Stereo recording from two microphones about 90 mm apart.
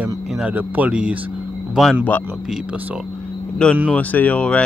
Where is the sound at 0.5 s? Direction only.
15° right (ahead or behind).